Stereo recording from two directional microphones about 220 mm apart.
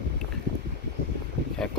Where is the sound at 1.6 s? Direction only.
Centre (ahead or behind).